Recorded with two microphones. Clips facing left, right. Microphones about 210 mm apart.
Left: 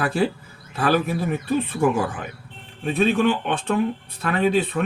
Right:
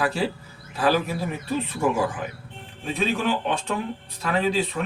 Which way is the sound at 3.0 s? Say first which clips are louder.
Left 5 dB; 55° left (ahead or behind).